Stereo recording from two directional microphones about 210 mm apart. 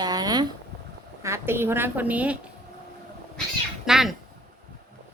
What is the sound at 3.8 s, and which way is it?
Cat, centre (ahead or behind).